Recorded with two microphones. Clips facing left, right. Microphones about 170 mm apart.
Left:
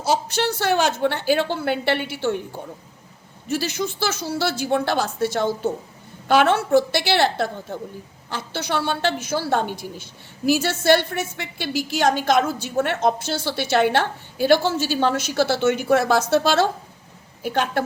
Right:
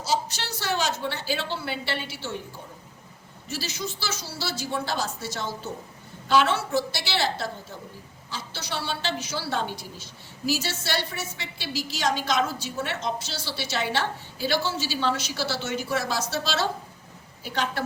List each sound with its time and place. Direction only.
0.0 s a woman's voice: 55° left (ahead or behind)